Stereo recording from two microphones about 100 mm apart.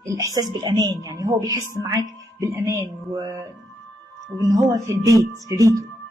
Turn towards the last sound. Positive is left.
turn(degrees=-35)  # may be behind; listen again after turning